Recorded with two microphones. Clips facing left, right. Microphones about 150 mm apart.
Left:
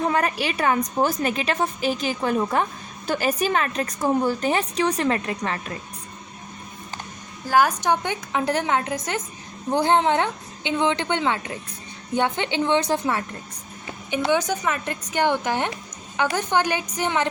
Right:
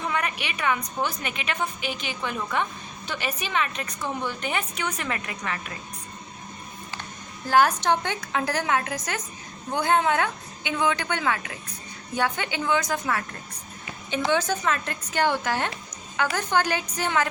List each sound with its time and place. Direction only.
0.0 s a woman's voice: 35° left (ahead or behind)
7.5 s a woman's voice: 15° left (ahead or behind)
14.1 s a woman's voice: 15° left (ahead or behind)